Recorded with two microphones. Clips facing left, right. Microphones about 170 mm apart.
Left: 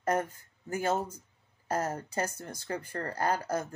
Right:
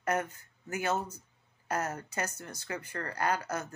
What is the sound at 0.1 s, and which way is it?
Speech, 30° left (ahead or behind).